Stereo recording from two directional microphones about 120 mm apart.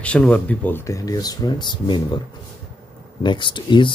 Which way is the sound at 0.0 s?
10° left (ahead or behind).